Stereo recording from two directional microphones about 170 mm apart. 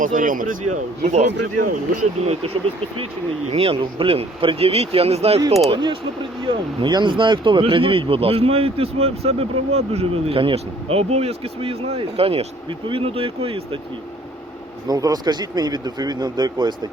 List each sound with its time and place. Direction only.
0.0 s speech: 50° right (ahead or behind); by 13.6 s 35° right (ahead or behind)
14.8 s speech: 20° right (ahead or behind)